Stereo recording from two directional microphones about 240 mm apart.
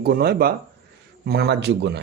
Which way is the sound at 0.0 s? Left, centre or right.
Right.